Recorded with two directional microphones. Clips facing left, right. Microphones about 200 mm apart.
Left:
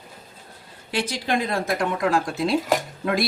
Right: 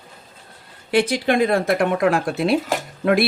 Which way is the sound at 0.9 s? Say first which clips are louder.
Right 7 dB; 60° right (ahead or behind).